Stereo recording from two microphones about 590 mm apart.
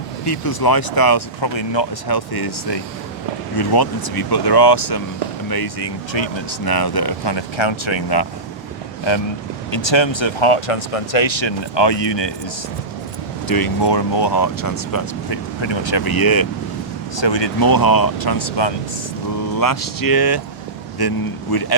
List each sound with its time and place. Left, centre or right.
0.3 s speech: left
13.5 s speech: left
15.6 s speech: left
17.2 s speech: left